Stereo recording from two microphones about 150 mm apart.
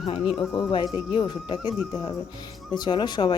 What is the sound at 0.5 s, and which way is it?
Speech, 30° left (ahead or behind).